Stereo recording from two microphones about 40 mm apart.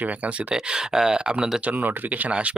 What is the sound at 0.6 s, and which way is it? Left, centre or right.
Speech, centre.